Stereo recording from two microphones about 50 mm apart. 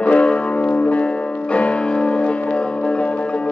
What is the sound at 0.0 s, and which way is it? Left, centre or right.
Music, left.